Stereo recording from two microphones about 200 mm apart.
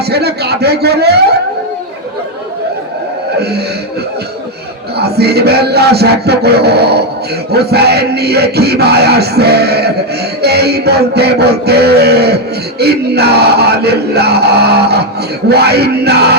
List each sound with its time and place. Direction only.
0.0 s music: 55° right (ahead or behind)
4.9 s music: 55° right (ahead or behind)